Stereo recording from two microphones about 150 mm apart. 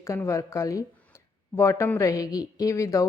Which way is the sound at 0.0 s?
20° left (ahead or behind).